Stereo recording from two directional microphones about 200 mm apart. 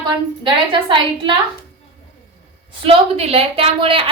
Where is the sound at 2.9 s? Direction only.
30° right (ahead or behind).